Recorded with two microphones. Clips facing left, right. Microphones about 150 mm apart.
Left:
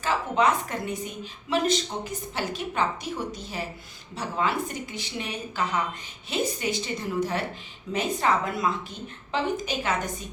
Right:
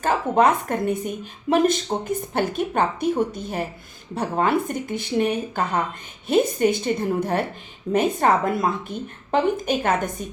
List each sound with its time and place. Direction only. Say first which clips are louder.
0.0 s a woman's voice: right 5 dB; 50° right (ahead or behind)